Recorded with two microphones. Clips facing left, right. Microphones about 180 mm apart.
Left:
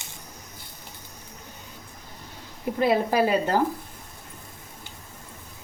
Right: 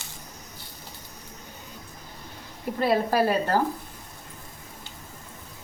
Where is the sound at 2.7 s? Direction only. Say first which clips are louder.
Left 1 dB; 15° left (ahead or behind).